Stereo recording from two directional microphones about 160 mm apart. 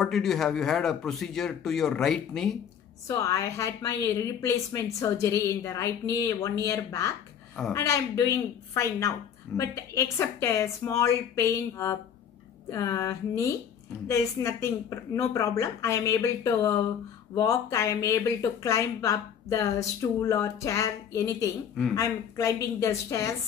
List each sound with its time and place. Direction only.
0.0 s speech: centre (ahead or behind)
3.1 s a woman's voice: 20° left (ahead or behind)